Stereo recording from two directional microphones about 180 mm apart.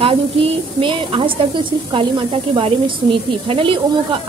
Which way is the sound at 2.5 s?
30° right (ahead or behind).